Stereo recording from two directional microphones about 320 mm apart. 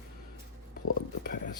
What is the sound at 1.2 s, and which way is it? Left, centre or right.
Whispering, left.